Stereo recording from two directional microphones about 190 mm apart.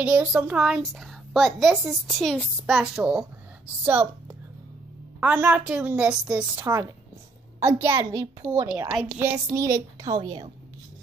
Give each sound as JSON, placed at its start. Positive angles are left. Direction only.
{"t": 0.0, "sound": "a woman's voice", "side_deg": -5}
{"t": 5.2, "sound": "a woman's voice", "side_deg": -10}